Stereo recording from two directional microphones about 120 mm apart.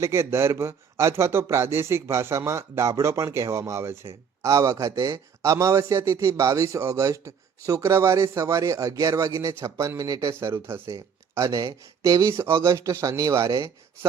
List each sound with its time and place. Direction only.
0.0 s a man's voice: 20° right (ahead or behind)